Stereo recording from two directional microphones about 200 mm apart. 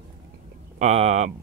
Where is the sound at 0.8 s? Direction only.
30° right (ahead or behind).